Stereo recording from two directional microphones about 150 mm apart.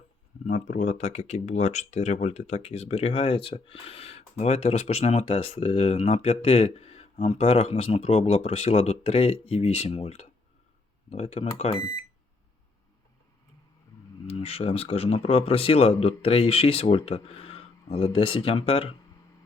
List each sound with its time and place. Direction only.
0.4 s speech: 55° left (ahead or behind)
14.3 s speech: 45° left (ahead or behind)